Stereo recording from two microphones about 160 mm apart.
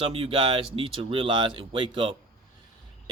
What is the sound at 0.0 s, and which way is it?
Speech, 35° right (ahead or behind).